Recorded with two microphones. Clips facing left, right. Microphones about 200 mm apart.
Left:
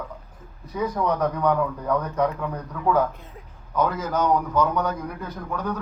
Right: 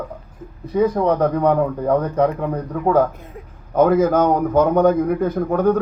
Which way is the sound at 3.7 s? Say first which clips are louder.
Right 10 dB; 50° right (ahead or behind).